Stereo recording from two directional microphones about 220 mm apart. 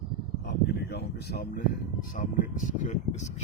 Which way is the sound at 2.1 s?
35° left (ahead or behind).